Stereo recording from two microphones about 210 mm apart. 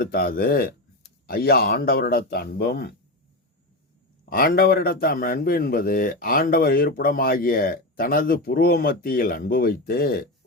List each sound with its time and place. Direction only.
0.0 s speech: 45° left (ahead or behind)
4.3 s speech: 45° left (ahead or behind)